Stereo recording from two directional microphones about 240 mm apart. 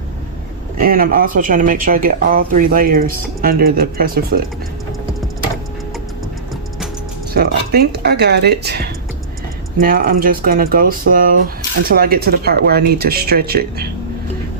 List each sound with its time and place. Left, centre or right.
0.8 s speech: right
7.3 s speech: right